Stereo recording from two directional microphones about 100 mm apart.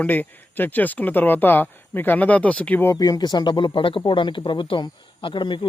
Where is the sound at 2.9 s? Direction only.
40° left (ahead or behind).